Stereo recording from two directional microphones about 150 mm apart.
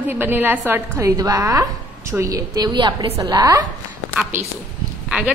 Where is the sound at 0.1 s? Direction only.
15° right (ahead or behind).